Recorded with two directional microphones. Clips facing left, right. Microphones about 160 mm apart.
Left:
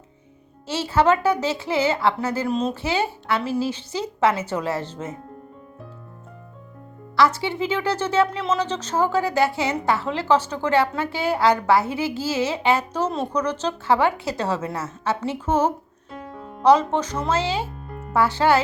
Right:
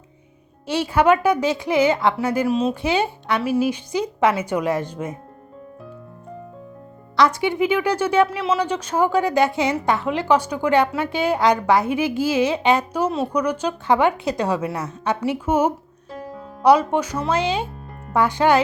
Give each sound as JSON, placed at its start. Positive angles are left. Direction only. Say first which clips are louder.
{"t": 0.7, "sound": "a woman's voice", "louder": "right 2 dB", "side_deg": -15}
{"t": 2.8, "sound": "a woman's voice", "louder": "right 3 dB", "side_deg": -15}
{"t": 7.2, "sound": "a woman's voice", "louder": "right 2 dB", "side_deg": -15}
{"t": 16.1, "sound": "music", "louder": "right 2 dB", "side_deg": 0}
{"t": 16.6, "sound": "a woman's voice", "louder": "right 1 dB", "side_deg": -10}